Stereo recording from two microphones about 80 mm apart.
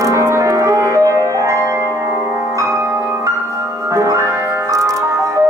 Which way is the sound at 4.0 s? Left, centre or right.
Right.